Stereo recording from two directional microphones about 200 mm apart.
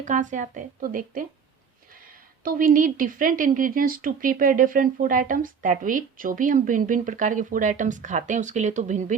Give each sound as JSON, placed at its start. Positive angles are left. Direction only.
{"t": 0.0, "sound": "a woman's voice", "side_deg": -40}
{"t": 2.4, "sound": "a woman's voice", "side_deg": -45}